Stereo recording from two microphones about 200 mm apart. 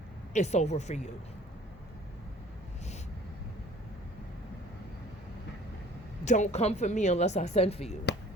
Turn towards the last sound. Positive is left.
turn(degrees=30)  # may be behind; listen again after turning